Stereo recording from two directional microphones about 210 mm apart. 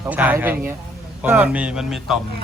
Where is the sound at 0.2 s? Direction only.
10° right (ahead or behind).